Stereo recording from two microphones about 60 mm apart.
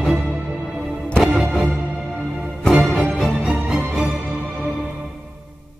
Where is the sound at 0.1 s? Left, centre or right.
Centre.